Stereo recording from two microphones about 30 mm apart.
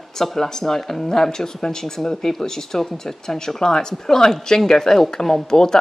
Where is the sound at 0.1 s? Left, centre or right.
Centre.